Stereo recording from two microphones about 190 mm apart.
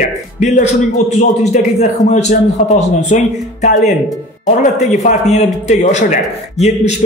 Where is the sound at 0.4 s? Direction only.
40° left (ahead or behind).